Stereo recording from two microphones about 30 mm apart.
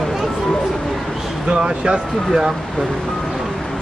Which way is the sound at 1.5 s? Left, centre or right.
Right.